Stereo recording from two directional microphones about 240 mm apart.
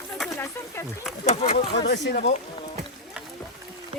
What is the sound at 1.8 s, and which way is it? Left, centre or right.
Speech, left.